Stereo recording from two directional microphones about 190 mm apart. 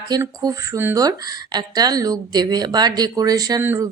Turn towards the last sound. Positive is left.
turn(degrees=-15)  # may be behind; listen again after turning